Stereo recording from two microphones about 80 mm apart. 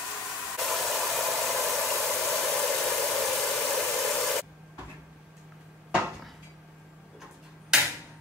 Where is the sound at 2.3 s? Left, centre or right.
Centre.